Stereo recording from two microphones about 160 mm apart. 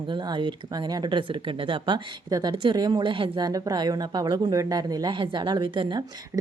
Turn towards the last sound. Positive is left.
turn(degrees=-25)  # may be behind; listen again after turning